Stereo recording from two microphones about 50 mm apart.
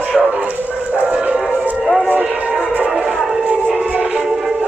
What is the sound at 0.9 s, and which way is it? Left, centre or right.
Music, right.